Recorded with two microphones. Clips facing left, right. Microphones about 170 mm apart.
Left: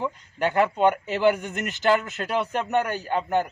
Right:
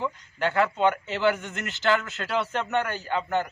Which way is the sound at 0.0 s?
15° left (ahead or behind).